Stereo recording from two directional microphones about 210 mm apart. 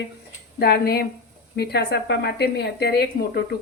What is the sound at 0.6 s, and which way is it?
Speech, 50° left (ahead or behind).